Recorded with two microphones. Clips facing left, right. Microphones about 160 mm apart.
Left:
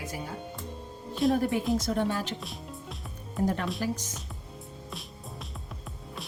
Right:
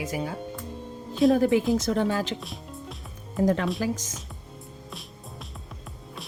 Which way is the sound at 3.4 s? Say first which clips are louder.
Right 5 dB; 90° right.